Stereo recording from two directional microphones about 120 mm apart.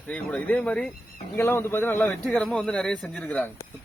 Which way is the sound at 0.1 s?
10° left (ahead or behind).